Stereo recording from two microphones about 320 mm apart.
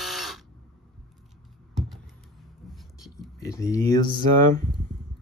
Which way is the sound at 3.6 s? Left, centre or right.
Centre.